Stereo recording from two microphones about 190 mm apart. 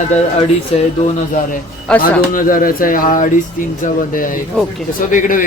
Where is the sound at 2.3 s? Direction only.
45° left (ahead or behind).